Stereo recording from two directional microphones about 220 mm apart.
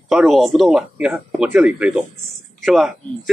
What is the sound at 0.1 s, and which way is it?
A man's voice, centre (ahead or behind).